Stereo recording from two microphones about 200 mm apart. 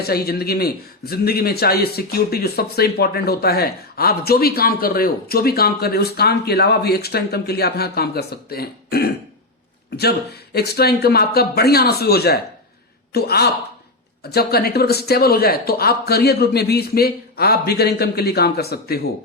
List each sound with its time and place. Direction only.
0.0 s speech: 50° left (ahead or behind)